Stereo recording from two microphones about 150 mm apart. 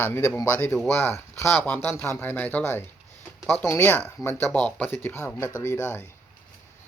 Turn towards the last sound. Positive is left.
turn(degrees=15)  # may be behind; listen again after turning